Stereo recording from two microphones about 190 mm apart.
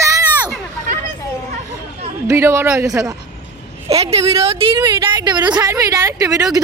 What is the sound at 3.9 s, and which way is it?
A woman's voice, 30° right (ahead or behind).